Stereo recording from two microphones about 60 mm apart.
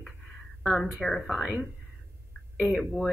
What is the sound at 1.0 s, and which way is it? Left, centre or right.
Speech, centre.